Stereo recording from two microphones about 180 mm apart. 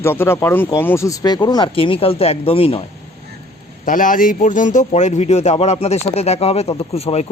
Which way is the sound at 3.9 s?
50° left (ahead or behind).